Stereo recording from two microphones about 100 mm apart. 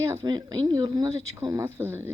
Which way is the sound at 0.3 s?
40° right (ahead or behind).